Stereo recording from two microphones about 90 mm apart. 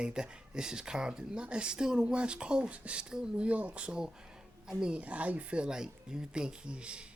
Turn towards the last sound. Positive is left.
turn(degrees=-10)  # may be behind; listen again after turning